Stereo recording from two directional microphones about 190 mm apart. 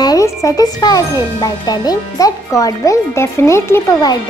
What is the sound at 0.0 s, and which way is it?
Speech, 20° left (ahead or behind).